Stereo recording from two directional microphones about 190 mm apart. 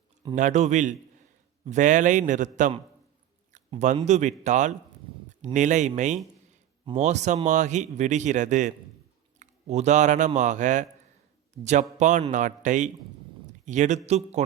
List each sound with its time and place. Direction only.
0.3 s a man's voice: 40° right (ahead or behind)